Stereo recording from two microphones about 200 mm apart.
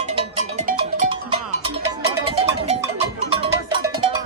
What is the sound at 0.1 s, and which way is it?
Music, 35° right (ahead or behind).